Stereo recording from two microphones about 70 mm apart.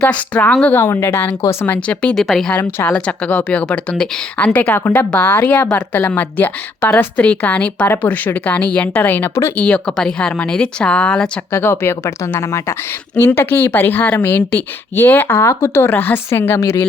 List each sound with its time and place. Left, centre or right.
0.0 s speech: centre
0.7 s a woman's voice: left
1.6 s speech: centre
2.1 s speech: centre
2.8 s a woman's voice: centre
9.6 s speech: centre
11.5 s a woman's voice: left